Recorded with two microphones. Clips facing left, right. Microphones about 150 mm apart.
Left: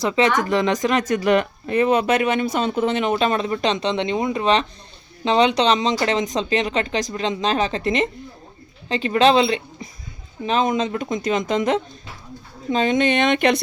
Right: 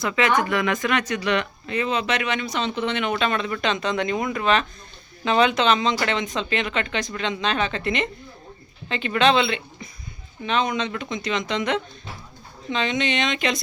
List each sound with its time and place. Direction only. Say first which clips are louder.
0.0 s speech: left 3 dB; 35° left (ahead or behind); by 13.6 s 55° left (ahead or behind)